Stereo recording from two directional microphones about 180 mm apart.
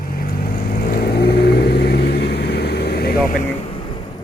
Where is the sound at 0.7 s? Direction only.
60° left (ahead or behind).